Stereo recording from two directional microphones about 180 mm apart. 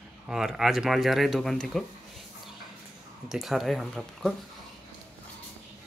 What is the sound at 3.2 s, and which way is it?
Speech, centre (ahead or behind).